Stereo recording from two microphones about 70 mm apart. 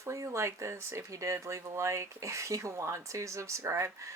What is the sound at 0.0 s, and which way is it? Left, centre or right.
Speech, right.